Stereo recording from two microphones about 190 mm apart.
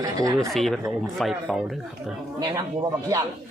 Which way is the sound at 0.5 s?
Centre (ahead or behind).